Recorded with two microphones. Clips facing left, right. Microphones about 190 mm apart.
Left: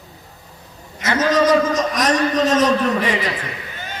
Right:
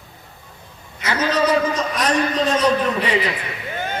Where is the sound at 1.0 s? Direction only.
45° left (ahead or behind).